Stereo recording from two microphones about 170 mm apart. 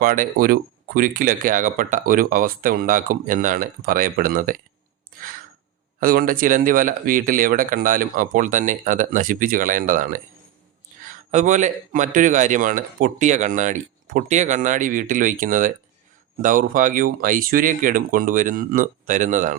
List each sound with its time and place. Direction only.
0.0 s speech: 55° right (ahead or behind)
6.0 s a man's voice: 60° right (ahead or behind)